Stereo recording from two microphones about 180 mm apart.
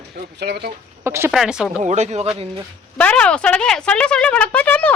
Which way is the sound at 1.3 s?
5° right (ahead or behind).